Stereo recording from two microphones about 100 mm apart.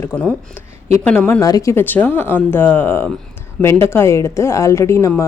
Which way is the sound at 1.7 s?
20° left (ahead or behind).